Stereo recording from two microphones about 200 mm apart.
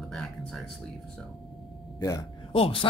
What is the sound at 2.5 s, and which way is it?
Speech, 25° left (ahead or behind).